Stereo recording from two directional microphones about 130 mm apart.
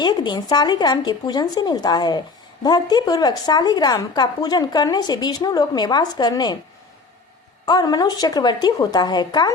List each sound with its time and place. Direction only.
0.0 s a woman's voice: 35° left (ahead or behind)
7.6 s a woman's voice: 30° left (ahead or behind)